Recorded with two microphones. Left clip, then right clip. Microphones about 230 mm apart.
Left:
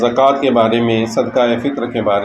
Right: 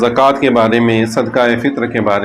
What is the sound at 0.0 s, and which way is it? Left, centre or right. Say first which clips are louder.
A man's voice: right 1 dB; right.